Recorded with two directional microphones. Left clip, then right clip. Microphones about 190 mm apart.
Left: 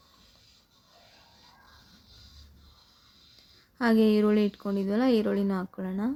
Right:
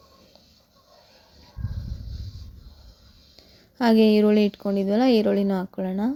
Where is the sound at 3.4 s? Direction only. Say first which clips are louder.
Right 5 dB; 15° right (ahead or behind).